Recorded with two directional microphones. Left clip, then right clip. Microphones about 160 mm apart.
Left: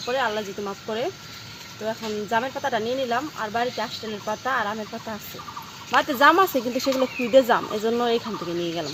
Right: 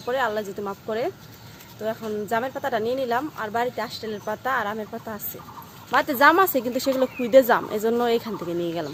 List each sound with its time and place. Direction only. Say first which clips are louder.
0.0 s speech: even; 15° right (ahead or behind)